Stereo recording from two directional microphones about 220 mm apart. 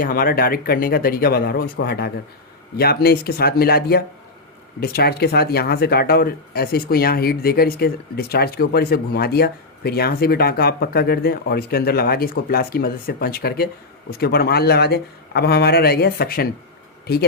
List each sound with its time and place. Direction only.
0.0 s speech: 40° left (ahead or behind)